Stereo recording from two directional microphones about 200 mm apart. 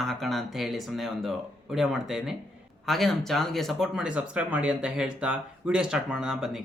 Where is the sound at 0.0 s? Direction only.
Centre (ahead or behind).